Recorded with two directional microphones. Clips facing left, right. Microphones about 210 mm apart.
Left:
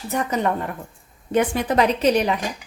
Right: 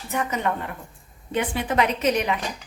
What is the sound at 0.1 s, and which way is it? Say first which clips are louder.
A woman's voice: left 3 dB; 35° left (ahead or behind).